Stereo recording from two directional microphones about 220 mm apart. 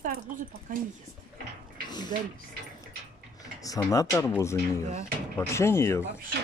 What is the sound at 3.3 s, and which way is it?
Speech, 15° left (ahead or behind).